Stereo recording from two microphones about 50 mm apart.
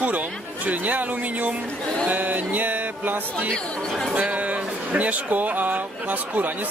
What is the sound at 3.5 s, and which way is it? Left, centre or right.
Speech, centre.